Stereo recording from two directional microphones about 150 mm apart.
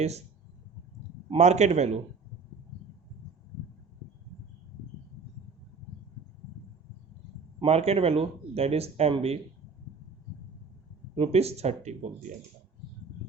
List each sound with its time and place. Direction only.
1.4 s speech: 50° right (ahead or behind)
7.6 s speech: 45° right (ahead or behind)
11.1 s speech: 40° right (ahead or behind)